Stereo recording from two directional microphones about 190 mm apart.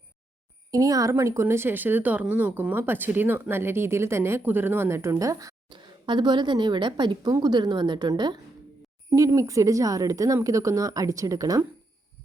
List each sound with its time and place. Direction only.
0.7 s speech: 20° right (ahead or behind)